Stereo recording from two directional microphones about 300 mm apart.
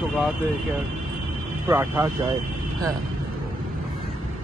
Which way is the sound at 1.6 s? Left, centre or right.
Centre.